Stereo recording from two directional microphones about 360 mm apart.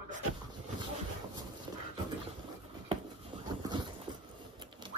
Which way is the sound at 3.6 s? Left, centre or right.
Centre.